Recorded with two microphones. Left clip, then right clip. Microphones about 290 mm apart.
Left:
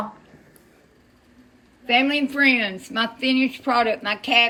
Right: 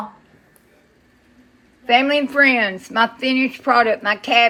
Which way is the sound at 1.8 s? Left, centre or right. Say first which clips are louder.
Right 4 dB; centre.